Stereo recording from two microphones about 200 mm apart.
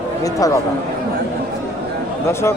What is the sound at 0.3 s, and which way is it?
Speech, 15° left (ahead or behind).